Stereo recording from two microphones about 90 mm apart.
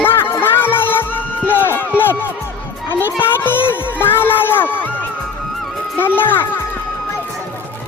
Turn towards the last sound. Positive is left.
turn(degrees=25)  # may be behind; listen again after turning